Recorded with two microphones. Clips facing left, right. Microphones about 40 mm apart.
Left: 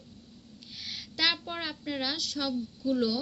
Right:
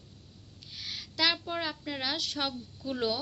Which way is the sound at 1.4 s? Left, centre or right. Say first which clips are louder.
Right 1 dB; centre.